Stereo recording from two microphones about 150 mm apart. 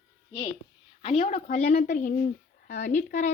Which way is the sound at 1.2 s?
50° left (ahead or behind).